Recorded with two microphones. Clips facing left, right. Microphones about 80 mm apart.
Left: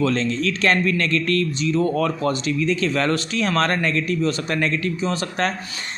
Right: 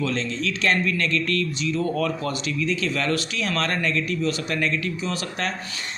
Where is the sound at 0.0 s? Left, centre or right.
Left.